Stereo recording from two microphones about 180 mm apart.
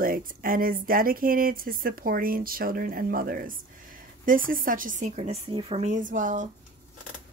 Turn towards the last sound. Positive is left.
turn(degrees=-45)  # may be behind; listen again after turning